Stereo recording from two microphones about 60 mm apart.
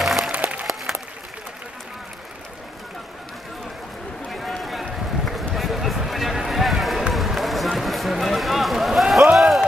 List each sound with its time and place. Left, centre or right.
0.0 s music: centre
0.3 s music: right
0.9 s applause: centre
4.3 s run: centre